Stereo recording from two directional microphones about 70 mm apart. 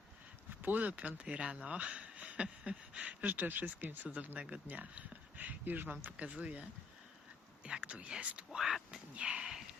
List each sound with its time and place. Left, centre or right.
0.6 s speech: right
8.5 s speech: centre
9.1 s a sound: centre